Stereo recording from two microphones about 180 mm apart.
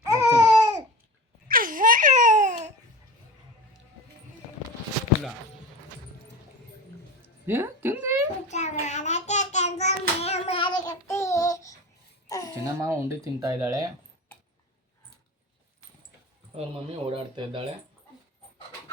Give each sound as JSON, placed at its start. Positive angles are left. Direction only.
{"t": 0.0, "sound": "babbling", "side_deg": -15}
{"t": 1.5, "sound": "a sound", "side_deg": -50}
{"t": 7.4, "sound": "a sound", "side_deg": -10}
{"t": 8.4, "sound": "child singing", "side_deg": 40}
{"t": 12.3, "sound": "babbling", "side_deg": 20}
{"t": 12.6, "sound": "speech", "side_deg": -15}
{"t": 16.6, "sound": "speech", "side_deg": -30}